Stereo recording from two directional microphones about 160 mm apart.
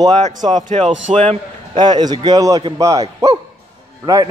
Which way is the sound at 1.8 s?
25° right (ahead or behind).